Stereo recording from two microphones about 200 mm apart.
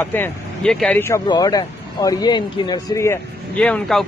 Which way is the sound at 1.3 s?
20° left (ahead or behind).